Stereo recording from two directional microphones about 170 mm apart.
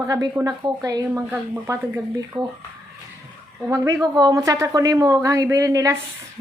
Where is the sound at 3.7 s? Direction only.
20° right (ahead or behind).